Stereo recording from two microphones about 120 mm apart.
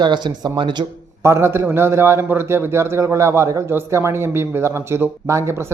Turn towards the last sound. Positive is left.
turn(degrees=-20)  # may be behind; listen again after turning